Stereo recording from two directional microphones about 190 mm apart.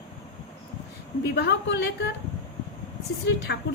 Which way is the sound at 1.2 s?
60° left (ahead or behind).